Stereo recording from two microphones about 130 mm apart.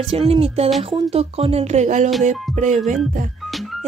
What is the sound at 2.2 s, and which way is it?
Music, 70° right (ahead or behind).